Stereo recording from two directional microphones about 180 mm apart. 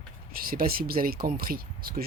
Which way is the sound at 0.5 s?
55° right (ahead or behind).